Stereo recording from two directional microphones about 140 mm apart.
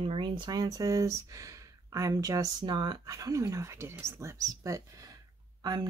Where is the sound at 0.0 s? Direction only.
40° right (ahead or behind).